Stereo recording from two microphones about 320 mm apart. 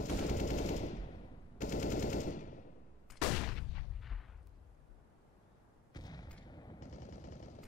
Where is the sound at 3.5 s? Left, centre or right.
Centre.